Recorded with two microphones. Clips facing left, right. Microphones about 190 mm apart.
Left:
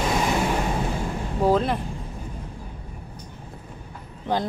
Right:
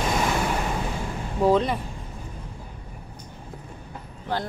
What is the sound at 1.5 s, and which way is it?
Speech, centre (ahead or behind).